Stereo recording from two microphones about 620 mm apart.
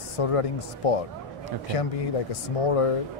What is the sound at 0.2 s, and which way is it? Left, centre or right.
Speech, left.